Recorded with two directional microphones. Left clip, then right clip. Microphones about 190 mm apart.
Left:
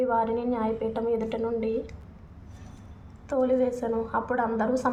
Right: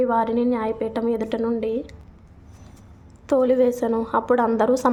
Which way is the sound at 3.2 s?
45° right (ahead or behind).